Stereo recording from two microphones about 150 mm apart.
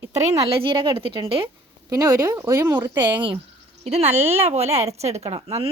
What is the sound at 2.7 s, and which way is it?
Speech, 30° right (ahead or behind).